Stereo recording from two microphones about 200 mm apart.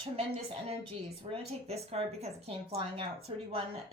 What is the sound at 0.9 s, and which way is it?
Speech, 30° right (ahead or behind).